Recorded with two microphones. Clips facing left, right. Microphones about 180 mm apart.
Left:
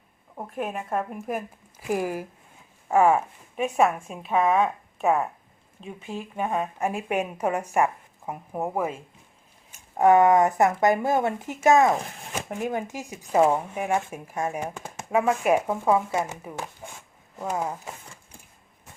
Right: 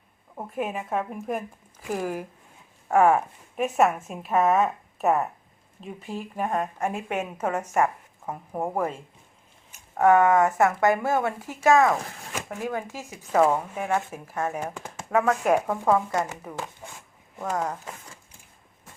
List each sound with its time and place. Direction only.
0.3 s speech: centre (ahead or behind)
10.0 s speech: 15° left (ahead or behind)